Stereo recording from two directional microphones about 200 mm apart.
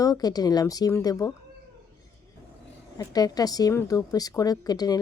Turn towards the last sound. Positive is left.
turn(degrees=20)  # may be behind; listen again after turning